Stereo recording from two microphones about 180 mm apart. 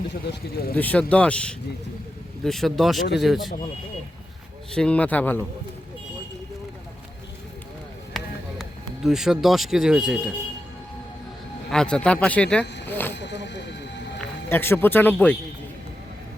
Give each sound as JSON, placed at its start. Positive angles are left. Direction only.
{"t": 0.3, "sound": "speech", "side_deg": 60}
{"t": 0.8, "sound": "speech", "side_deg": 10}
{"t": 4.7, "sound": "speech", "side_deg": 5}
{"t": 8.1, "sound": "a sound", "side_deg": 0}
{"t": 9.0, "sound": "speech", "side_deg": 0}
{"t": 11.7, "sound": "speech", "side_deg": 5}
{"t": 12.9, "sound": "a sound", "side_deg": 10}
{"t": 13.1, "sound": "speech", "side_deg": 75}
{"t": 14.2, "sound": "speech", "side_deg": 10}